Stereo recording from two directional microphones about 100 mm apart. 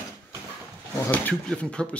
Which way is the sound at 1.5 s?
10° left (ahead or behind).